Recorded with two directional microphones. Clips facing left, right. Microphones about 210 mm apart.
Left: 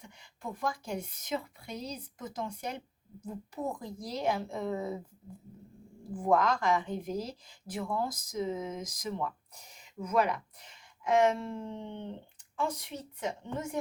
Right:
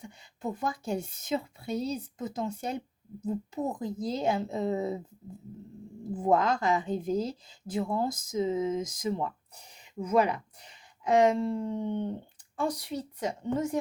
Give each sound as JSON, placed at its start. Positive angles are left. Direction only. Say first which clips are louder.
{"t": 0.4, "sound": "speech", "louder": "right 4 dB", "side_deg": -25}
{"t": 6.0, "sound": "speech", "louder": "right 2 dB", "side_deg": -25}
{"t": 11.7, "sound": "dog", "louder": "right 9 dB", "side_deg": -45}
{"t": 12.6, "sound": "speech", "louder": "right 5 dB", "side_deg": -35}